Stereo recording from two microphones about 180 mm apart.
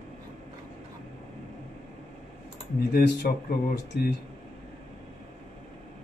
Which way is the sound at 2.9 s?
60° left (ahead or behind).